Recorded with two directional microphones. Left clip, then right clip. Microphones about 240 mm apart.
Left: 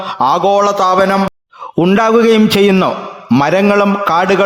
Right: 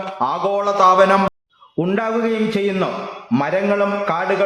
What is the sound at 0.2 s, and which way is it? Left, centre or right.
Speech, left.